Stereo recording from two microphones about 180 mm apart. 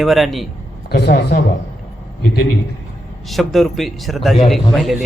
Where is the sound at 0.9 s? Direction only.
65° left (ahead or behind).